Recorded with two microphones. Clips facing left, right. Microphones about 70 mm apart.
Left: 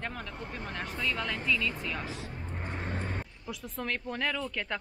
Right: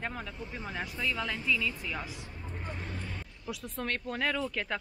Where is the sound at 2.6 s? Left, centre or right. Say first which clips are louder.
Left 4 dB; left.